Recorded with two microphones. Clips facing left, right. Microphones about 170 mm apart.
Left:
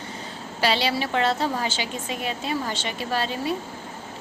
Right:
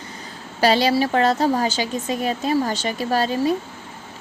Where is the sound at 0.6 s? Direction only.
40° right (ahead or behind).